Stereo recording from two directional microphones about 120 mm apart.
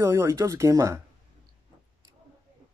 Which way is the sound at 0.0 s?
20° right (ahead or behind).